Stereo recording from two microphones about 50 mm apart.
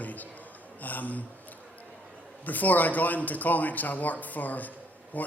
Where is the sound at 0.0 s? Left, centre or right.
Left.